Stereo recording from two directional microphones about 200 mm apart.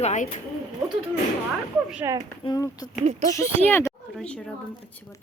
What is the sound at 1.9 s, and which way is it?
Speech, 10° right (ahead or behind).